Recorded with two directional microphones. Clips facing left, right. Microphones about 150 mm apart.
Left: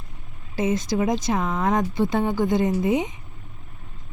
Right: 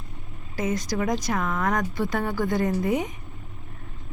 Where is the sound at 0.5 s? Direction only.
25° left (ahead or behind).